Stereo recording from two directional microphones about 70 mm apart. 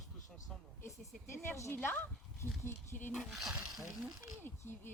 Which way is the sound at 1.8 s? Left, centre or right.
Left.